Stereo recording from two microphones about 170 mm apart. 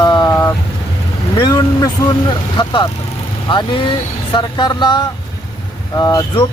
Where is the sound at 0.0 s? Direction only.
25° left (ahead or behind).